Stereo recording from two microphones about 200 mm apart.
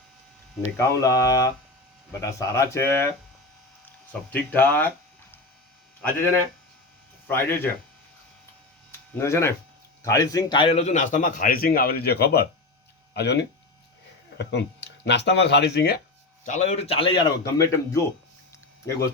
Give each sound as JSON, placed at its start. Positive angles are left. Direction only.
{"t": 0.8, "sound": "speech", "side_deg": 15}
{"t": 7.3, "sound": "speech", "side_deg": 10}
{"t": 8.9, "sound": "a sound", "side_deg": 15}
{"t": 10.0, "sound": "a man's voice", "side_deg": 15}
{"t": 16.4, "sound": "a man's voice", "side_deg": 35}